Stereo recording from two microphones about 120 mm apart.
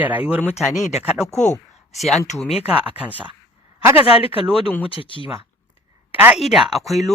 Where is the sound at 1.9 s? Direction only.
Centre (ahead or behind).